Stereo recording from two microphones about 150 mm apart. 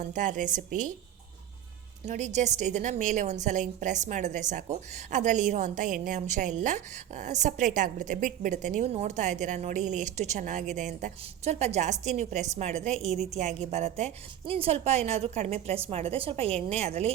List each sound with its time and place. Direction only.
0.0 s a woman's voice: 55° right (ahead or behind)
2.0 s a woman's voice: 50° right (ahead or behind)